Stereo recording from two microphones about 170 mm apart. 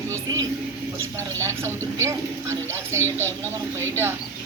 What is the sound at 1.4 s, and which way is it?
A child's voice, 15° right (ahead or behind).